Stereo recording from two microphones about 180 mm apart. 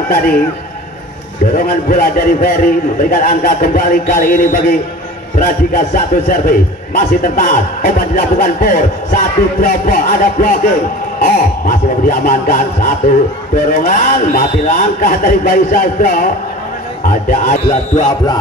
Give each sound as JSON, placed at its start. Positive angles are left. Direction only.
{"t": 0.1, "sound": "a man's voice", "side_deg": 55}
{"t": 1.5, "sound": "a man's voice", "side_deg": 50}